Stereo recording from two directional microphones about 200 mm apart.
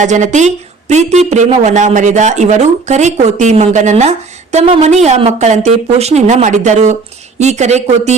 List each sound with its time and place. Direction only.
0.0 s speech: 35° right (ahead or behind)